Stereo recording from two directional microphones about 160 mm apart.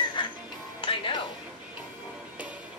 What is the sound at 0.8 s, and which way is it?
Music, 30° left (ahead or behind).